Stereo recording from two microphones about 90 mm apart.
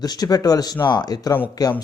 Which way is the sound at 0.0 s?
45° left (ahead or behind).